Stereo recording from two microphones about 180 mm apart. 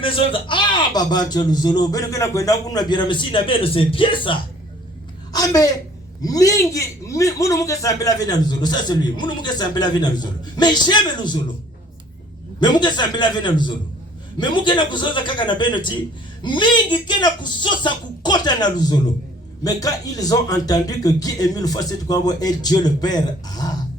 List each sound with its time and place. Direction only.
0.0 s a man's voice: 30° left (ahead or behind)
12.5 s a man's voice: 25° left (ahead or behind)